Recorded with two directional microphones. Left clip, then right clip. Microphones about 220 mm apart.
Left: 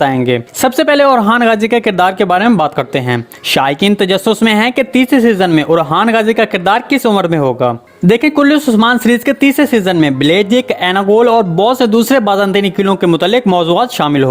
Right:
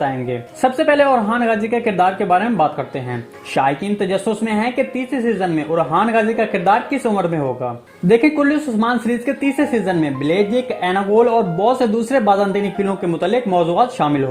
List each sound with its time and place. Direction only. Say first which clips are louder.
0.0 s speech: left 9 dB; 40° left (ahead or behind)